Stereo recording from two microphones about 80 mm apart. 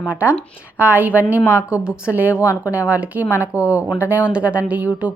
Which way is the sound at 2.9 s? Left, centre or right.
Centre.